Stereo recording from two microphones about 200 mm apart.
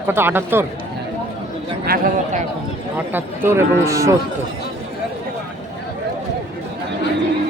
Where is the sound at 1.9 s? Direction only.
40° right (ahead or behind).